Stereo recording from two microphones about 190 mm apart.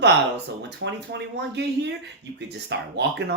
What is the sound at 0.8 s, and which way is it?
Speech, 90° right.